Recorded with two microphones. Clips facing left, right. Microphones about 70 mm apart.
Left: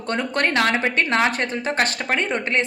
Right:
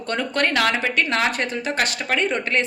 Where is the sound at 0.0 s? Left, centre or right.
Left.